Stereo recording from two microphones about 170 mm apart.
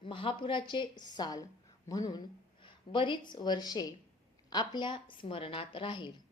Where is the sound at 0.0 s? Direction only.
30° left (ahead or behind).